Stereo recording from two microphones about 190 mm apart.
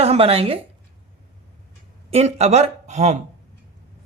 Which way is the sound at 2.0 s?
35° right (ahead or behind).